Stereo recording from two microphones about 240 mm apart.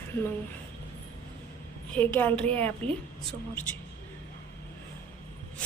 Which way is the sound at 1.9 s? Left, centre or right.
Centre.